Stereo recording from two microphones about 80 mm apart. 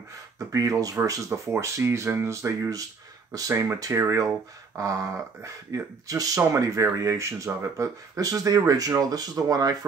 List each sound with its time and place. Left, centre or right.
0.5 s speech: right